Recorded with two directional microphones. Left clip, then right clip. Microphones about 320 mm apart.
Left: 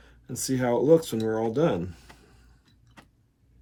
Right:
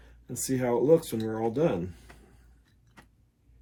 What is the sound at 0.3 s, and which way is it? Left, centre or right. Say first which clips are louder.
Speech: left 2 dB; centre.